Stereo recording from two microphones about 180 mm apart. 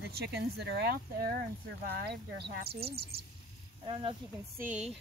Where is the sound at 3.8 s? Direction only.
30° right (ahead or behind).